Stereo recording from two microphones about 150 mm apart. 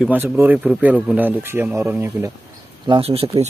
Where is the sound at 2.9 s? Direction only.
40° right (ahead or behind).